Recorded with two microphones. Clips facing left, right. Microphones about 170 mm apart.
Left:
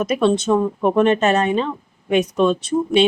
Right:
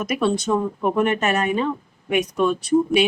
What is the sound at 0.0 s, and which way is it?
Speech, 25° left (ahead or behind).